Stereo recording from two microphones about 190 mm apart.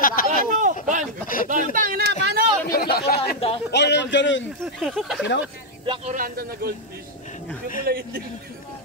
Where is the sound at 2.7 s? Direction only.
55° left (ahead or behind).